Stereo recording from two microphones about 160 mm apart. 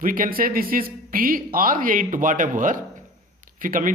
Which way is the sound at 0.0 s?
60° right (ahead or behind).